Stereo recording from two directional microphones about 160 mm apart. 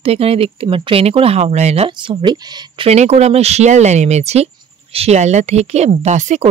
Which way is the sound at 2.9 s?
45° right (ahead or behind).